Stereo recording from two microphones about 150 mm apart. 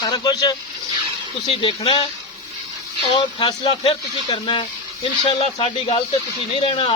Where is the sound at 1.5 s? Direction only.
40° left (ahead or behind).